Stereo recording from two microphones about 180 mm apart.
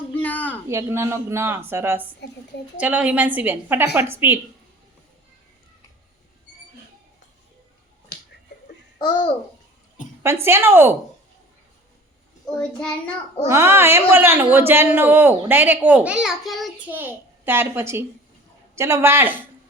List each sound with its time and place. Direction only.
0.1 s a sound: 10° left (ahead or behind)
0.7 s speech: 15° right (ahead or behind)
9.0 s a child's voice: 25° left (ahead or behind)
10.4 s speech: 15° right (ahead or behind)
12.5 s child singing: 5° left (ahead or behind)
13.5 s speech: 15° right (ahead or behind)
16.9 s a child's voice: 10° right (ahead or behind)